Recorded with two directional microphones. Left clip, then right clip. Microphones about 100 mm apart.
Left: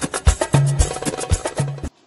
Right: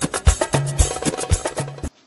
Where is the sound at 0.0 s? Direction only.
Centre (ahead or behind).